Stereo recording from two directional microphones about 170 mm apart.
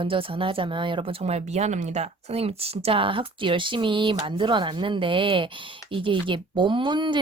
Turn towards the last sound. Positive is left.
turn(degrees=-25)  # may be behind; listen again after turning